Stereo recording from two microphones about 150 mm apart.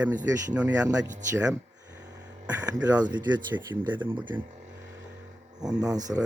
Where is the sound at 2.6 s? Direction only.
25° right (ahead or behind).